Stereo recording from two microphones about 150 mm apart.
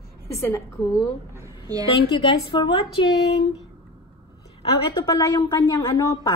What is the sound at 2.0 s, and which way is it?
A woman's voice, 35° left (ahead or behind).